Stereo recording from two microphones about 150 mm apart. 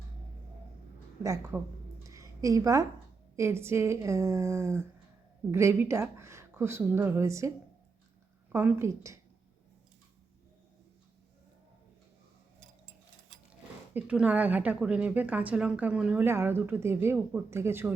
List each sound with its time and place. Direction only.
1.2 s a woman's voice: 20° right (ahead or behind)
2.0 s a sound: 20° right (ahead or behind)
3.3 s a woman's voice: 20° right (ahead or behind)
8.5 s speech: 15° right (ahead or behind)
13.5 s speech: 10° right (ahead or behind)